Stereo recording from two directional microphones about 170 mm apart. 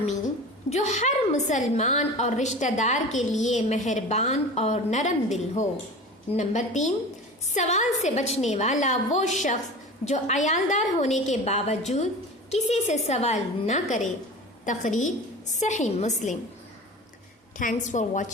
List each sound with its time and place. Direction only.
0.7 s a woman's voice: 45° left (ahead or behind)
17.6 s a woman's voice: 50° left (ahead or behind)